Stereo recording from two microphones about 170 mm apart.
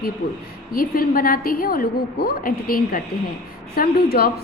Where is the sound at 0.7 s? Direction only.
60° left (ahead or behind).